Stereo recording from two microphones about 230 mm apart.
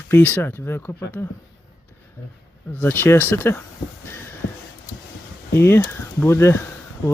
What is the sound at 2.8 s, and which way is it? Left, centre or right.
Speech, centre.